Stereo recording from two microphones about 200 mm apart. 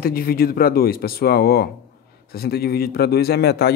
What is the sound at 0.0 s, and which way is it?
Speech, 50° left (ahead or behind).